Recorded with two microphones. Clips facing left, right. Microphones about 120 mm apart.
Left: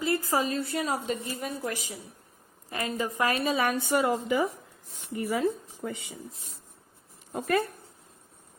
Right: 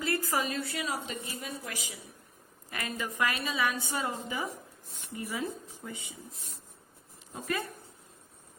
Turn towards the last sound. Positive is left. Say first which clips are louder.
# left 8 dB
turn(degrees=55)  # may be behind; listen again after turning